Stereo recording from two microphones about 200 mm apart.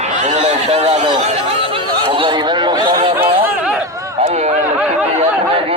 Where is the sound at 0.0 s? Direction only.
35° right (ahead or behind).